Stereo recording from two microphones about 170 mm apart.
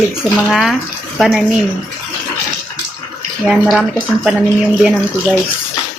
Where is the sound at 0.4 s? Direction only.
Centre (ahead or behind).